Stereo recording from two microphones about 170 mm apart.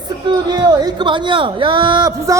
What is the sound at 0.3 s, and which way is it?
Speech, 25° right (ahead or behind).